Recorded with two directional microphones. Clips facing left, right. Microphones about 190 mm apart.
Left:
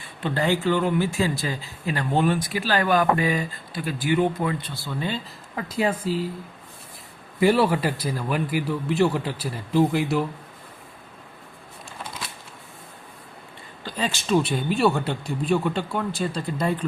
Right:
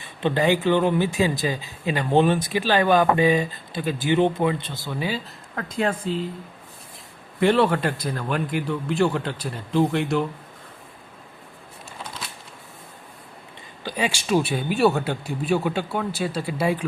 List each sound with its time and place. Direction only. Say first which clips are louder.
0.2 s speech: right 3 dB; 20° right (ahead or behind)
4.9 s speech: right 1 dB; 5° right (ahead or behind)
5.5 s speech: even; 5° left (ahead or behind)
7.3 s speech: even; 5° left (ahead or behind)
13.8 s speech: right 2 dB; 10° right (ahead or behind)